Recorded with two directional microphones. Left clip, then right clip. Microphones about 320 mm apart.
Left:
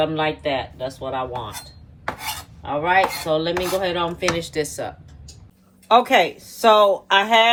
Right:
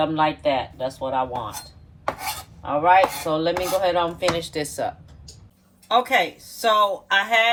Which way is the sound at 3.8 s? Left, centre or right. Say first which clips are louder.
Right 1 dB; centre.